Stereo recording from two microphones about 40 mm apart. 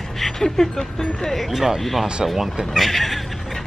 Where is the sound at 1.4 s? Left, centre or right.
Centre.